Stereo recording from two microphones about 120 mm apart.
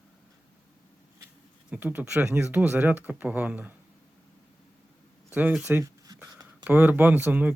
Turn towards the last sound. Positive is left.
turn(degrees=-15)  # may be behind; listen again after turning